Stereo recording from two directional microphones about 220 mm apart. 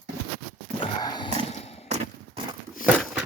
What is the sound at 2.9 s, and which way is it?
Dog, centre (ahead or behind).